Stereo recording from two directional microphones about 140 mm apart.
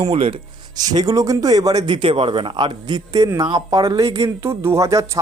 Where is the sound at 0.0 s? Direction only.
40° right (ahead or behind).